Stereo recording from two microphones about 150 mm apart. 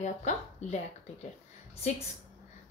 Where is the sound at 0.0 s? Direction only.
50° left (ahead or behind).